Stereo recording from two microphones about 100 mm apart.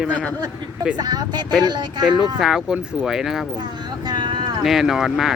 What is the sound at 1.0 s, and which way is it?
Speech, 40° right (ahead or behind).